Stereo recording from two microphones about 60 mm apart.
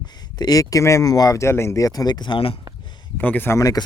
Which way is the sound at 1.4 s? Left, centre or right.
Left.